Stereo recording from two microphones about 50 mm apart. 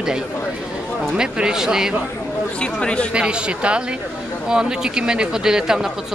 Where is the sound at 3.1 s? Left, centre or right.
Right.